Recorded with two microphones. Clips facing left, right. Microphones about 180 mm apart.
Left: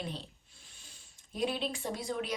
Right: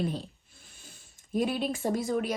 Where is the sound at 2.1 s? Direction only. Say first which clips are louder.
Right 7 dB; 50° right (ahead or behind).